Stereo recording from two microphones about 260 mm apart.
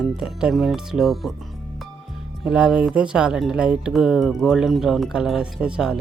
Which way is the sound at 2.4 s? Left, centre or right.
Centre.